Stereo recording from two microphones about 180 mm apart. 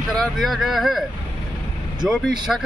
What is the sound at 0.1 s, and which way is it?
Speech, centre (ahead or behind).